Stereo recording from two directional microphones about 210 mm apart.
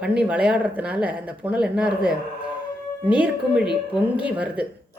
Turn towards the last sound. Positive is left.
turn(degrees=-5)  # may be behind; listen again after turning